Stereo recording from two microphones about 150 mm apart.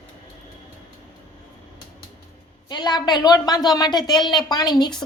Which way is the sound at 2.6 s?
30° left (ahead or behind).